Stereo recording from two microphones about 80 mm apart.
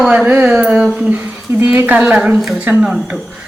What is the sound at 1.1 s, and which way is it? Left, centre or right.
Speech, right.